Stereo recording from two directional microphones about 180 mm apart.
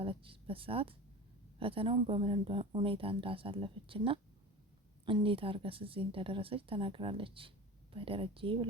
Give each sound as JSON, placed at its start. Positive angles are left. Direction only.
{"t": 0.0, "sound": "speech", "side_deg": -30}